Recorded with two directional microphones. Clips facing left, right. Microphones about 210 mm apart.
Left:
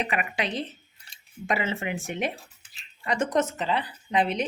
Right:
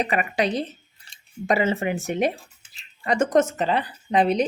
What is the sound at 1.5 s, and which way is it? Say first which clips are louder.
Speech: right 6 dB; 40° right (ahead or behind).